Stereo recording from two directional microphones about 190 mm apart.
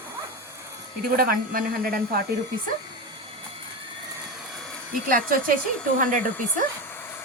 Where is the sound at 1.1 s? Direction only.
50° right (ahead or behind).